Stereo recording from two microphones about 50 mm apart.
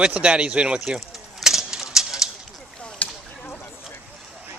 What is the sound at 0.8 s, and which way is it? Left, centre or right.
Pigeon, centre.